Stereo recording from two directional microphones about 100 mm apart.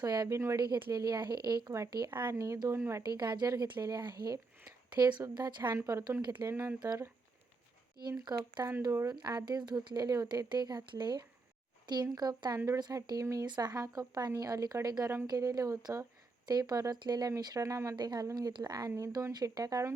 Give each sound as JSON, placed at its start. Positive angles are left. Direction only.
{"t": 0.0, "sound": "speech", "side_deg": -40}
{"t": 0.3, "sound": "speech", "side_deg": -30}
{"t": 0.6, "sound": "speech", "side_deg": -45}
{"t": 2.0, "sound": "speech", "side_deg": -20}
{"t": 3.0, "sound": "speech", "side_deg": -45}
{"t": 5.7, "sound": "speech", "side_deg": -30}
{"t": 8.2, "sound": "speech", "side_deg": -45}
{"t": 8.9, "sound": "speech", "side_deg": -25}
{"t": 9.1, "sound": "speech", "side_deg": -40}
{"t": 17.9, "sound": "speech", "side_deg": -45}
{"t": 18.9, "sound": "speech", "side_deg": -30}
{"t": 19.3, "sound": "speech", "side_deg": -40}